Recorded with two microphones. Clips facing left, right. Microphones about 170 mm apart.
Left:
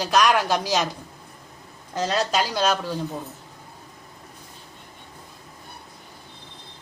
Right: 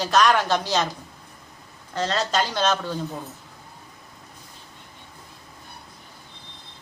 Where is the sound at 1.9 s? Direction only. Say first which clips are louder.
Left 1 dB; 10° left (ahead or behind).